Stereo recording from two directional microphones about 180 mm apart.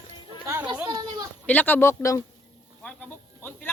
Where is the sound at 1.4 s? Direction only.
10° left (ahead or behind).